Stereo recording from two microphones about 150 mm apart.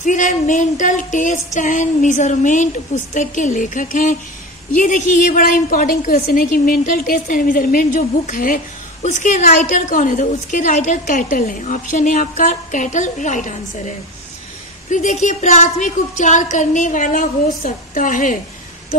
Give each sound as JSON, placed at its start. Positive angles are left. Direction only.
{"t": 0.0, "sound": "a woman's voice", "side_deg": 55}
{"t": 9.0, "sound": "a woman's voice", "side_deg": 55}